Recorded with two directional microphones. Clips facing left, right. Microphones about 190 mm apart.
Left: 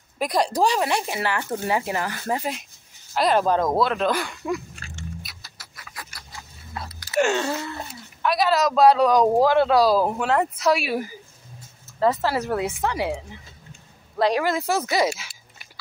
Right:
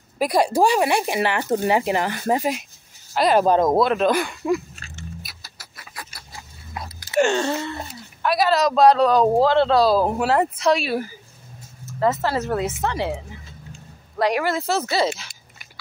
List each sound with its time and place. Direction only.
0.2 s speech: 5° right (ahead or behind)
3.2 s speech: 5° right (ahead or behind)
3.4 s speech: 20° right (ahead or behind)
5.4 s chicken: 30° right (ahead or behind)
7.2 s a sound: 5° left (ahead or behind)
7.7 s speech: centre (ahead or behind)
10.0 s speech: 5° right (ahead or behind); by 13.1 s 10° left (ahead or behind)
14.4 s speech: 15° left (ahead or behind)